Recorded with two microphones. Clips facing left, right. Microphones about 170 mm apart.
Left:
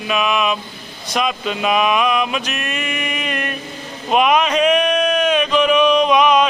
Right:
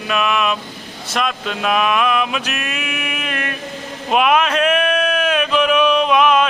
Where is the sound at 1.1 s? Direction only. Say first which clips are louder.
Left 1 dB; centre (ahead or behind).